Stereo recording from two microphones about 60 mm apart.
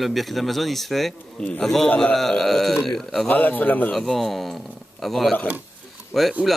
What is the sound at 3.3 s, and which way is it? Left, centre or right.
Speech, left.